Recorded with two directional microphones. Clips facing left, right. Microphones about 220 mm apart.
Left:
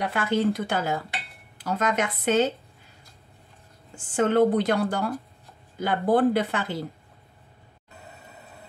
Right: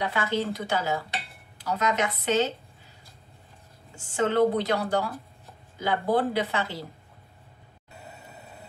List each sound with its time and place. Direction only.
0.1 s a woman's voice: 55° left (ahead or behind)
3.9 s a woman's voice: 50° left (ahead or behind)